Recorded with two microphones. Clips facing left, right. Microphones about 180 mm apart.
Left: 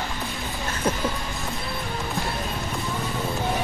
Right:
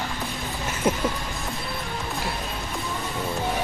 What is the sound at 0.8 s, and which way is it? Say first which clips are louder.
Music: right 2 dB; 20° right (ahead or behind).